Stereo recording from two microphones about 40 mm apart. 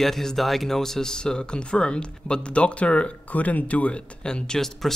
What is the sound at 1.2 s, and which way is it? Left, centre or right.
Speech, left.